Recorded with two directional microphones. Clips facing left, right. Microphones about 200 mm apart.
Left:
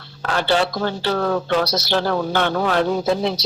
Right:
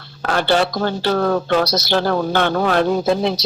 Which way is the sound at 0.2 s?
50° right (ahead or behind).